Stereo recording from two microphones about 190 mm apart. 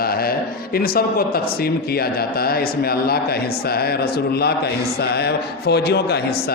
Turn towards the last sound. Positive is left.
turn(degrees=60)  # may be behind; listen again after turning